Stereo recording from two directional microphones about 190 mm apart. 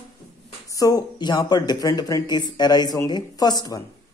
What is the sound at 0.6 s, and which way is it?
Speech, 20° left (ahead or behind).